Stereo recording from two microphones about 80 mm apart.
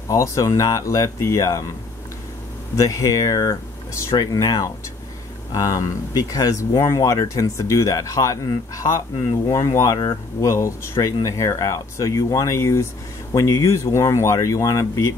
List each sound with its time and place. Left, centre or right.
0.1 s speech: left
2.7 s speech: left